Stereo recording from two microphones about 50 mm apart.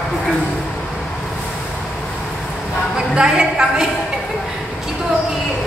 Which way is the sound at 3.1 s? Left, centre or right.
Centre.